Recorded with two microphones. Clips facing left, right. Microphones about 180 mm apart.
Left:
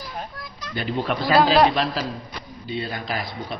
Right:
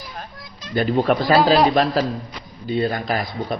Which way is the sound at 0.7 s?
45° right (ahead or behind).